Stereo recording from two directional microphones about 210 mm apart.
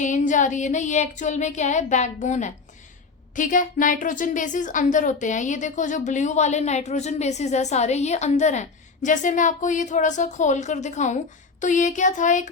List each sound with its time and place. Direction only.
0.0 s a woman's voice: 35° left (ahead or behind)